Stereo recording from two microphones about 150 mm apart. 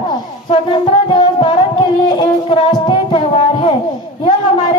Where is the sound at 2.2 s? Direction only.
35° left (ahead or behind).